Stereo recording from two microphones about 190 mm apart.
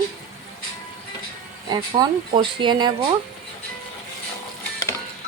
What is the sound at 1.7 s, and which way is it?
Speech, 20° right (ahead or behind).